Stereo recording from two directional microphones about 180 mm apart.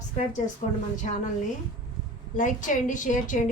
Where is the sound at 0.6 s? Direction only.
45° left (ahead or behind).